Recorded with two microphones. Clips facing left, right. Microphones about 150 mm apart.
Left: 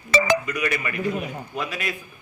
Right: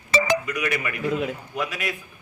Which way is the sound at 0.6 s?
10° right (ahead or behind).